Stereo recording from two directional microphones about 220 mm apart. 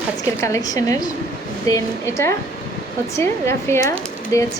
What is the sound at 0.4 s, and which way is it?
Speech, 15° left (ahead or behind).